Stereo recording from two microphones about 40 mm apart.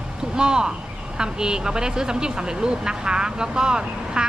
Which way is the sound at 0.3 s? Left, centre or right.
Centre.